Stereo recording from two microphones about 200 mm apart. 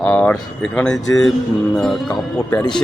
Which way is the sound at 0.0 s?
10° left (ahead or behind).